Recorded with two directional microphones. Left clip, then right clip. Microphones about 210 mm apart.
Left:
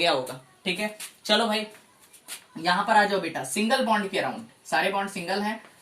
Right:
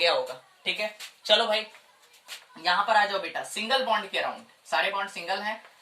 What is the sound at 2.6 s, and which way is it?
Speech, 20° left (ahead or behind).